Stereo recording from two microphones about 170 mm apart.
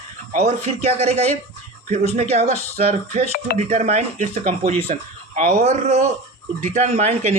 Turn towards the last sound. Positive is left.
turn(degrees=-40)  # may be behind; listen again after turning